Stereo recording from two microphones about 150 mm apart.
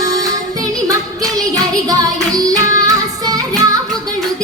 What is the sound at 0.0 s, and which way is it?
Music, 25° right (ahead or behind).